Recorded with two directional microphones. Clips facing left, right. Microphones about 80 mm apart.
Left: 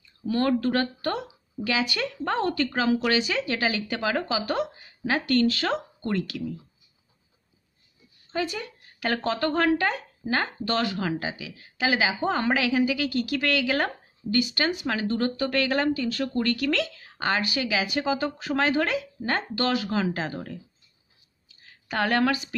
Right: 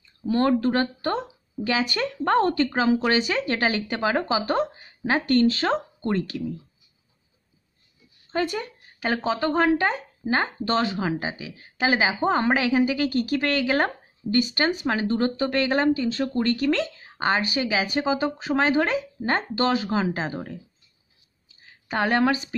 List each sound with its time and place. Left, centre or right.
0.3 s speech: right
2.5 s speech: right
3.2 s speech: right
8.3 s speech: right
9.0 s speech: centre
21.5 s a sound: right